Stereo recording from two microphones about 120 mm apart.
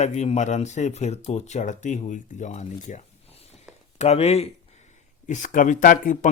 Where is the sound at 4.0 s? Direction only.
60° left (ahead or behind).